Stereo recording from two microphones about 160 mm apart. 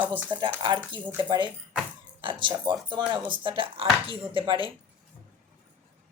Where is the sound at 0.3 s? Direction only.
30° right (ahead or behind).